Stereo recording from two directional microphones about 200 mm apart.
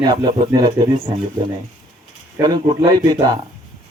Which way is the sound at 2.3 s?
20° right (ahead or behind).